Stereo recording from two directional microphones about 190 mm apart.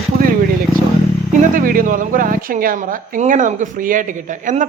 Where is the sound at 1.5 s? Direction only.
45° right (ahead or behind).